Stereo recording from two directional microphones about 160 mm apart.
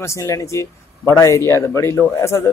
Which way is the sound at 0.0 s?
20° left (ahead or behind).